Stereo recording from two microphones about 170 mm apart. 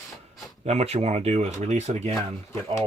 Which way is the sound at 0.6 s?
40° right (ahead or behind).